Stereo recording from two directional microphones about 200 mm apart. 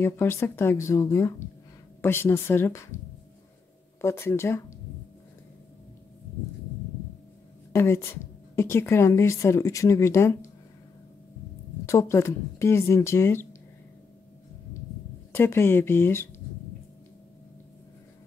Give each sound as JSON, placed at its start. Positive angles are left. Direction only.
{"t": 0.0, "sound": "a woman's voice", "side_deg": 10}
{"t": 4.0, "sound": "a woman's voice", "side_deg": 15}
{"t": 7.7, "sound": "a woman's voice", "side_deg": 15}
{"t": 11.8, "sound": "a woman's voice", "side_deg": 15}
{"t": 15.3, "sound": "a woman's voice", "side_deg": 10}